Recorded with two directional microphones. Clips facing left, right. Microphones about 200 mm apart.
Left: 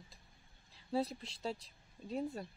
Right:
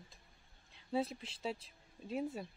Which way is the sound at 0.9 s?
Centre (ahead or behind).